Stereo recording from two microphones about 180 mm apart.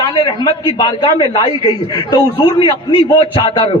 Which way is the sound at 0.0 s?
30° left (ahead or behind).